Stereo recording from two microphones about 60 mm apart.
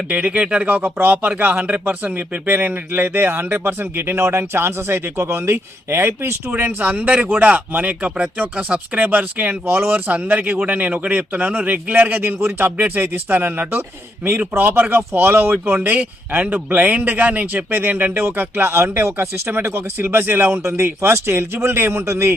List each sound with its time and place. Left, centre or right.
0.1 s speech: right
0.7 s speech: right
6.5 s speech: right
18.7 s speech: right